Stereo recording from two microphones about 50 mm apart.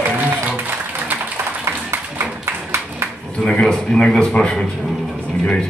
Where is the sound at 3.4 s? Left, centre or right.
Centre.